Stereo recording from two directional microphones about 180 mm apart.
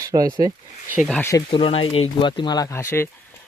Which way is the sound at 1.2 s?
20° left (ahead or behind).